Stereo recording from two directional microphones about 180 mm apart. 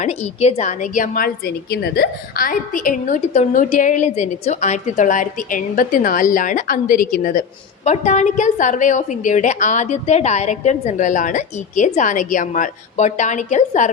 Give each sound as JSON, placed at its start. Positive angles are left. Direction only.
{"t": 0.0, "sound": "a woman's voice", "side_deg": 35}